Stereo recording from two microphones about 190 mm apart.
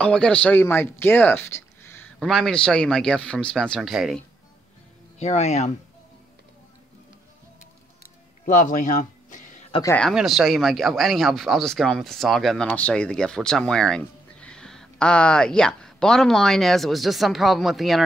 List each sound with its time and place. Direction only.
0.0 s speech: 5° left (ahead or behind)
2.1 s speech: centre (ahead or behind)
5.2 s speech: 35° left (ahead or behind)
8.5 s a sound: 45° left (ahead or behind)
9.8 s speech: 5° left (ahead or behind)